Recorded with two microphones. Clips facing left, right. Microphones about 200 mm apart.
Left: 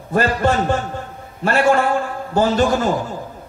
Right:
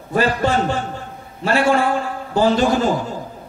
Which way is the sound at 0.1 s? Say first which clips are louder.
Left 1 dB; 45° left (ahead or behind).